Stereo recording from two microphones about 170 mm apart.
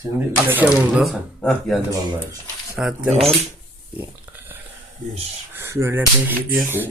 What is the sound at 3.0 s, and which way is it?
Speech, centre (ahead or behind).